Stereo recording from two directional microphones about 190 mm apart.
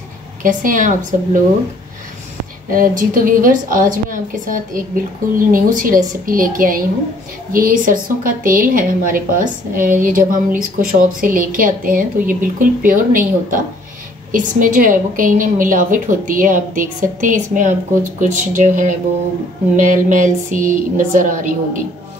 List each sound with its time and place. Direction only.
0.4 s a woman's voice: 45° right (ahead or behind)
2.7 s a woman's voice: 45° right (ahead or behind)